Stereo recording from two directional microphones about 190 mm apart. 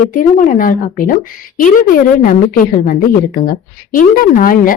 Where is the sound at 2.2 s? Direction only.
45° left (ahead or behind).